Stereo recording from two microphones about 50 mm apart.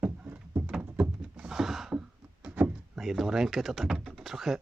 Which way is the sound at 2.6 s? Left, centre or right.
Right.